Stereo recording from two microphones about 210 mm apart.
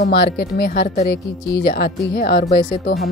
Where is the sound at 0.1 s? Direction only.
50° left (ahead or behind).